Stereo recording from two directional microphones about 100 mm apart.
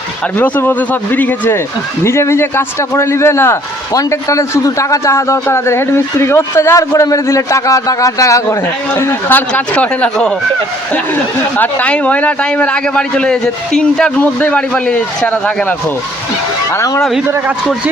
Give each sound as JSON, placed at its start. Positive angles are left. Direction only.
{"t": 0.3, "sound": "speech", "side_deg": 20}
{"t": 9.5, "sound": "speech", "side_deg": 15}
{"t": 16.7, "sound": "speech", "side_deg": 35}
{"t": 17.0, "sound": "speech", "side_deg": 0}